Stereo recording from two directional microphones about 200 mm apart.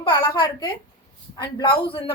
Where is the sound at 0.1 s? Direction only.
20° left (ahead or behind).